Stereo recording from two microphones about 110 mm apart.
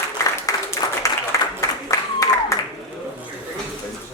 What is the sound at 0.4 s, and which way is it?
Applause, 30° left (ahead or behind).